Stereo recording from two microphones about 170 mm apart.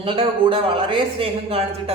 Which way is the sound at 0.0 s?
30° right (ahead or behind).